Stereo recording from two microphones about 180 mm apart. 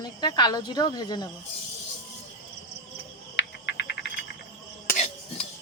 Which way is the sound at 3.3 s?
75° left (ahead or behind).